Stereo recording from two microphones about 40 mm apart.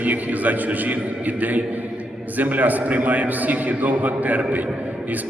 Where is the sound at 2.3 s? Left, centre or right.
Right.